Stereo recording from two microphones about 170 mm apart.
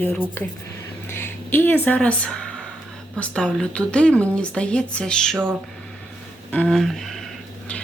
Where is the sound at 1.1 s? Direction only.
15° left (ahead or behind).